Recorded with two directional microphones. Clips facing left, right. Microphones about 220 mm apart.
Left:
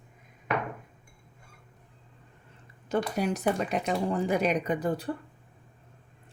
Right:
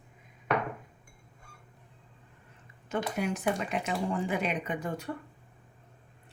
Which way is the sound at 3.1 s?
40° left (ahead or behind).